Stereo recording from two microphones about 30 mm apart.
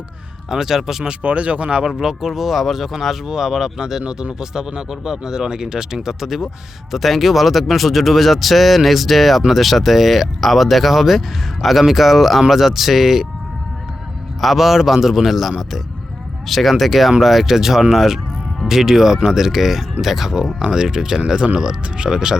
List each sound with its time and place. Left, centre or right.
0.5 s speech: centre
1.2 s speech: right
1.9 s speech: centre
4.0 s speech: right
6.9 s speech: centre
14.4 s speech: centre
20.7 s speech: right